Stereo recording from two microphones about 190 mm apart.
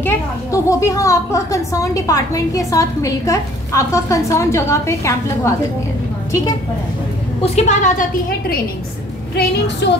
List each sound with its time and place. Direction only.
0.0 s a woman's voice: 15° left (ahead or behind)
7.4 s a woman's voice: 35° left (ahead or behind)
9.3 s a woman's voice: 60° left (ahead or behind)